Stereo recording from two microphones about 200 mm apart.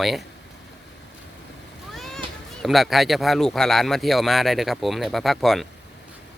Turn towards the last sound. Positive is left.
turn(degrees=0)  # may be behind; listen again after turning